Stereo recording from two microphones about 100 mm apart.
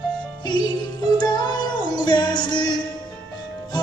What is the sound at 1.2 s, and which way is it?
Music, 45° left (ahead or behind).